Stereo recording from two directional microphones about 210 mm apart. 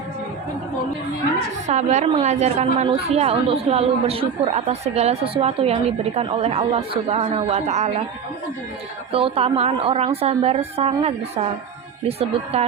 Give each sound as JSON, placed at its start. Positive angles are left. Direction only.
{"t": 1.6, "sound": "a woman's voice", "side_deg": -35}
{"t": 9.1, "sound": "a woman's voice", "side_deg": -25}